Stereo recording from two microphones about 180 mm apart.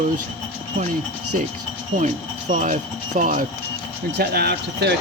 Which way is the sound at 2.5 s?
45° right (ahead or behind).